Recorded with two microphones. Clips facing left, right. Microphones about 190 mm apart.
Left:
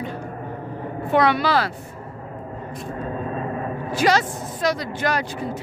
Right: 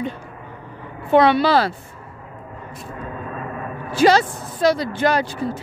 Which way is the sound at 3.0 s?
30° left (ahead or behind).